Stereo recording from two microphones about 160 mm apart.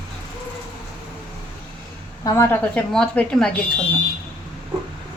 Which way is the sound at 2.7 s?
5° left (ahead or behind).